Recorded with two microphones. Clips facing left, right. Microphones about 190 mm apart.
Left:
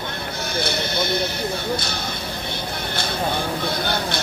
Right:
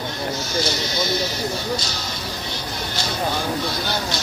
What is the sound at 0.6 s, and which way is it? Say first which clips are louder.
Speech: left 1 dB; 60° left (ahead or behind).